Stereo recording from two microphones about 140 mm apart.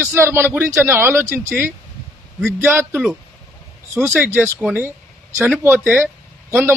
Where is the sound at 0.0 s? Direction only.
15° right (ahead or behind).